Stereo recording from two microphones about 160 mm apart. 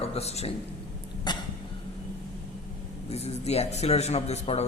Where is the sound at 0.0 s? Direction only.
40° left (ahead or behind).